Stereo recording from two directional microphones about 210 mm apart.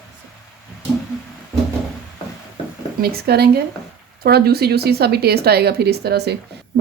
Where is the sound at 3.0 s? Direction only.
50° right (ahead or behind).